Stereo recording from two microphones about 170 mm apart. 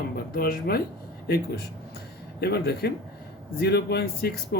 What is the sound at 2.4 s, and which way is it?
Speech, 70° left (ahead or behind).